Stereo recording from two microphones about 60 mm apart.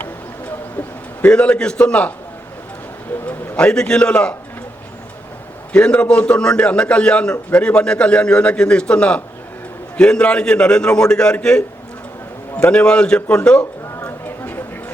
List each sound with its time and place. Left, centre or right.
1.3 s a man's voice: centre
3.2 s bird: left
4.0 s a man's voice: left
5.7 s a man's voice: centre
12.6 s a man's voice: centre
14.3 s a sound: left